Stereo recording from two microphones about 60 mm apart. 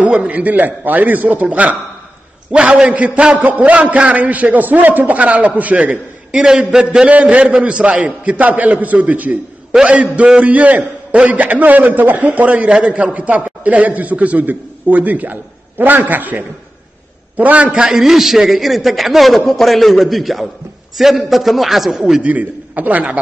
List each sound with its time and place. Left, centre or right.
0.0 s a man's voice: right
6.3 s a man's voice: centre
22.2 s a man's voice: right